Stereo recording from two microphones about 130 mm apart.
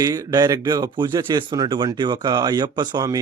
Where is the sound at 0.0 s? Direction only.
30° right (ahead or behind).